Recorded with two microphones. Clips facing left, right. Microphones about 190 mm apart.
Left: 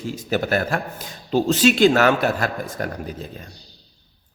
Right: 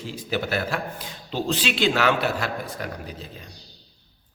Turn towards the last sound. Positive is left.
turn(degrees=45)  # may be behind; listen again after turning